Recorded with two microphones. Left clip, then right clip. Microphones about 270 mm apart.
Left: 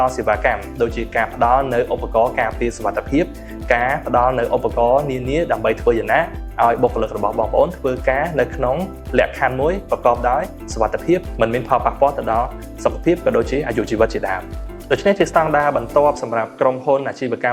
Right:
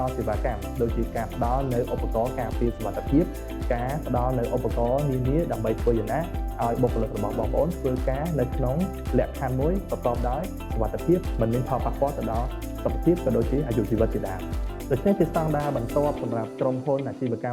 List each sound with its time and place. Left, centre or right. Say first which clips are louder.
0.0 s speech: left 11 dB; centre
5.3 s speech: left 10 dB; centre
6.8 s speech: left 9 dB; left
8.0 s speech: left 10 dB; centre